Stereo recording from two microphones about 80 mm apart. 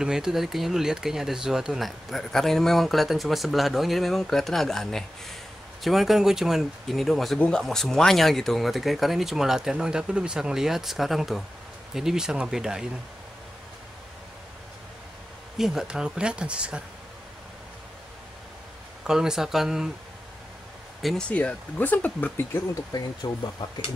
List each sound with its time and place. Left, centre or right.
0.0 s speech: centre
7.3 s speech: centre
7.6 s speech: centre
15.5 s speech: centre
19.0 s speech: centre
21.0 s speech: centre
21.3 s speech: centre
22.9 s speech: left